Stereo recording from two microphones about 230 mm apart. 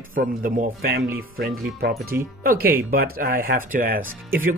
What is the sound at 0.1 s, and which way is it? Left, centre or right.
Speech, right.